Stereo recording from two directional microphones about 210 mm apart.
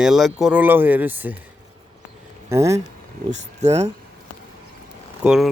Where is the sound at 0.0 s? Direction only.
Centre (ahead or behind).